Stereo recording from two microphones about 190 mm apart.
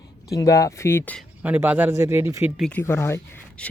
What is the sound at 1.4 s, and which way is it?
Speech, 10° right (ahead or behind).